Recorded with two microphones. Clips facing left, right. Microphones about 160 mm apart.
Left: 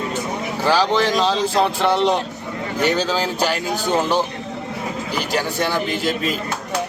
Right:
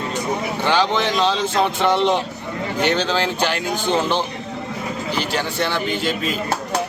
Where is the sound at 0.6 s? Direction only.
5° left (ahead or behind).